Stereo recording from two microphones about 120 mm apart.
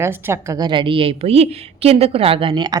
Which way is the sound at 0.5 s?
40° right (ahead or behind).